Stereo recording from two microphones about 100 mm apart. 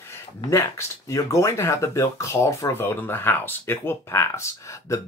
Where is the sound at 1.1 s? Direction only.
30° left (ahead or behind).